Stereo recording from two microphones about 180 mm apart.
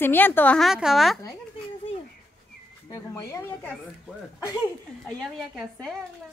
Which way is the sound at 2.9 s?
20° left (ahead or behind).